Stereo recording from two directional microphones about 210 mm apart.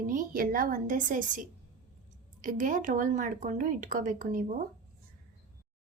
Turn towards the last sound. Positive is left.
turn(degrees=-40)  # may be behind; listen again after turning